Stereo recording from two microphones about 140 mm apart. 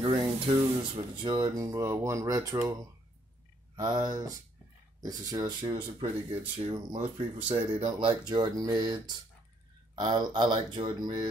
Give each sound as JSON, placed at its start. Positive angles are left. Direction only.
{"t": 0.0, "sound": "speech", "side_deg": -40}
{"t": 3.7, "sound": "speech", "side_deg": -30}